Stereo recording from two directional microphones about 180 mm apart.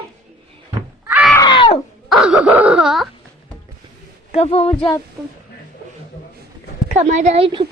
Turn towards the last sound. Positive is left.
turn(degrees=-30)  # may be behind; listen again after turning